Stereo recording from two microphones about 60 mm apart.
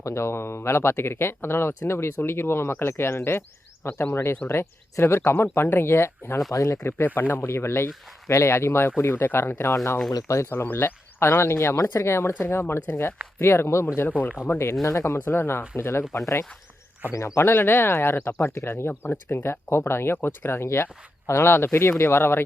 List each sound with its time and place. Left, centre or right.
0.0 s speech: left
6.5 s speech: left
6.7 s speech: left
7.5 s speech: left
9.7 s speech: left
10.5 s speech: left
14.1 s speech: left
14.4 s speech: left
15.2 s speech: left
16.1 s speech: left